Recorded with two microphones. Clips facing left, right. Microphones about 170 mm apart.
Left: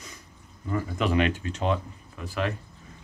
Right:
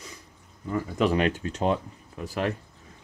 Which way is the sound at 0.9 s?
40° right (ahead or behind).